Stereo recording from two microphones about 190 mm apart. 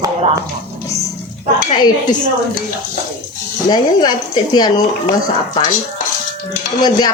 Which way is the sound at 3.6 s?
20° left (ahead or behind).